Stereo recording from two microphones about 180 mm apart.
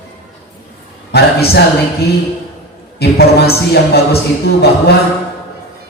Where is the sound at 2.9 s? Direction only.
60° left (ahead or behind).